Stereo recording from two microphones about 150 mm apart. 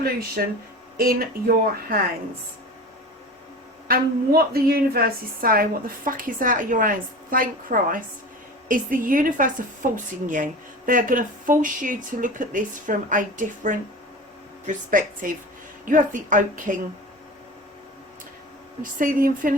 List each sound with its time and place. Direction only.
0.4 s speech: 90° right
0.9 s a woman's voice: 75° right (ahead or behind)
3.8 s a woman's voice: 80° right; by 16.8 s 60° right (ahead or behind)
18.8 s speech: 60° right (ahead or behind)